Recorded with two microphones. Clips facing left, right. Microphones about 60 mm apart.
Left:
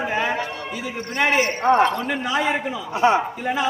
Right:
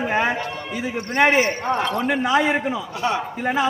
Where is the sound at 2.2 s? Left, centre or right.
Right.